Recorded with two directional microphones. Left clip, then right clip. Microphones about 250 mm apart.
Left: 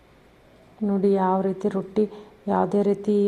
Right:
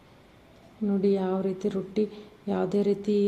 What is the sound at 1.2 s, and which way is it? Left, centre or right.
Speech, centre.